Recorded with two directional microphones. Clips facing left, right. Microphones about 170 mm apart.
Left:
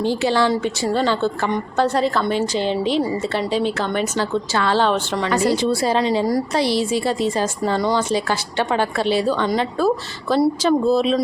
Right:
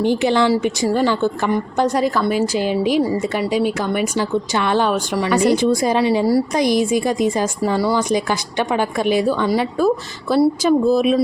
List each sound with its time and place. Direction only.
0.0 s a woman's voice: 15° right (ahead or behind)